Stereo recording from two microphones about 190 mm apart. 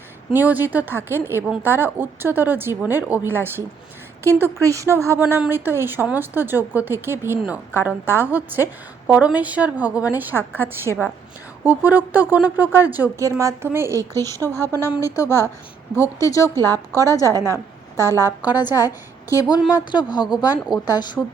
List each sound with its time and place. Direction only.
0.3 s a woman's voice: 10° right (ahead or behind)
14.1 s a woman's voice: 15° left (ahead or behind)
19.3 s a woman's voice: 20° left (ahead or behind)